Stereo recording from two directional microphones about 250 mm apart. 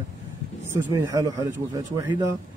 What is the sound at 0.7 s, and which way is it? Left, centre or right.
Speech, centre.